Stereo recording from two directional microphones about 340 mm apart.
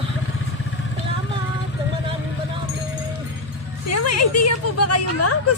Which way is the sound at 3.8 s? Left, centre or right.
Left.